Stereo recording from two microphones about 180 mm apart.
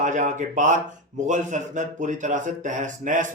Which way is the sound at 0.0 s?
45° right (ahead or behind).